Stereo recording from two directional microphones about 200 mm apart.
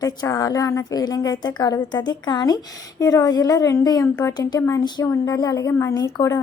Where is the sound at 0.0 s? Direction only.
15° left (ahead or behind).